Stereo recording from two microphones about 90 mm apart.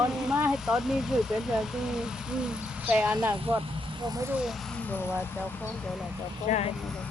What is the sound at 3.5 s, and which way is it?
Speech, 25° right (ahead or behind).